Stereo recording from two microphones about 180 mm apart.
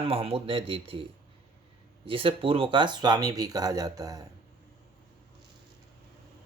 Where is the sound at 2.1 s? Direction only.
30° right (ahead or behind).